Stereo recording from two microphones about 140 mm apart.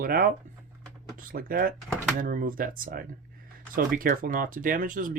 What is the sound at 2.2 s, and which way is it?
Speech, 80° right.